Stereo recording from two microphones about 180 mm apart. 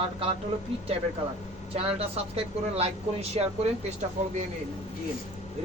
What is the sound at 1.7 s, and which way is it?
Speech, 35° right (ahead or behind).